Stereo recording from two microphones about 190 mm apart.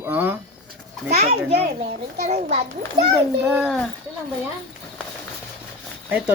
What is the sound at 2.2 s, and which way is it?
Speech, 35° right (ahead or behind).